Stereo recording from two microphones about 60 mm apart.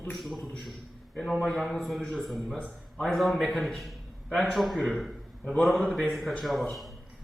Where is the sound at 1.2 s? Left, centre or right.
Centre.